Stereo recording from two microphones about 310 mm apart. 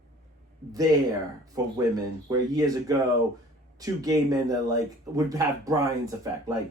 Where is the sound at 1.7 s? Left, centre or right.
Centre.